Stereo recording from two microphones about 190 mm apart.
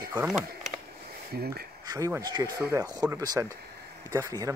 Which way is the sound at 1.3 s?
55° right (ahead or behind).